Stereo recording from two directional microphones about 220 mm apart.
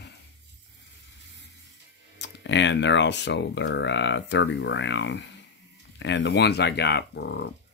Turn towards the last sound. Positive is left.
turn(degrees=50)  # may be behind; listen again after turning